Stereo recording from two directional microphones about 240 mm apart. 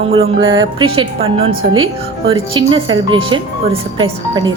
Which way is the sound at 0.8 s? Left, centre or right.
Right.